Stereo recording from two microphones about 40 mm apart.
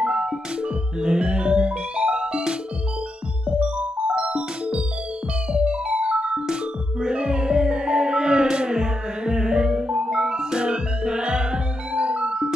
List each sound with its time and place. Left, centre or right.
0.0 s music: right
6.4 s music: centre